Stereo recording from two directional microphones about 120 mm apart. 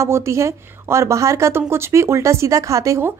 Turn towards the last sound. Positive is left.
turn(degrees=-25)  # may be behind; listen again after turning